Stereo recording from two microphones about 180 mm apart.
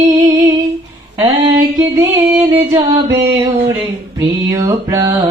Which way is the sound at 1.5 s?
20° right (ahead or behind).